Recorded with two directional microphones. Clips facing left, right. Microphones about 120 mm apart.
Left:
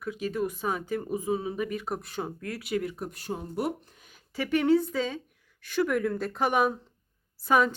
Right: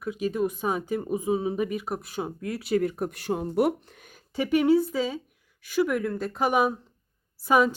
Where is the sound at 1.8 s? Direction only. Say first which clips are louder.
Right 2 dB; 5° right (ahead or behind).